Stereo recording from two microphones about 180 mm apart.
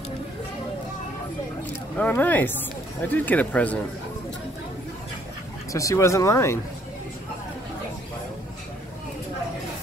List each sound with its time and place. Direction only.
2.0 s speech: 10° left (ahead or behind)
5.7 s speech: 20° left (ahead or behind)